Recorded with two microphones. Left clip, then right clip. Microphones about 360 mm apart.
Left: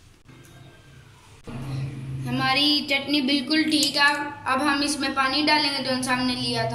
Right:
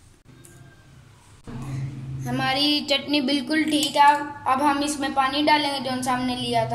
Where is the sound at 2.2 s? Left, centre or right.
Right.